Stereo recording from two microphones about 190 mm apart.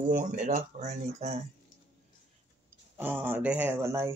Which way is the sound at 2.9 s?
10° right (ahead or behind).